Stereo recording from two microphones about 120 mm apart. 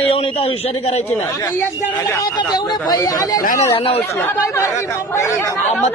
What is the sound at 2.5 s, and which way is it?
Speech, 35° left (ahead or behind).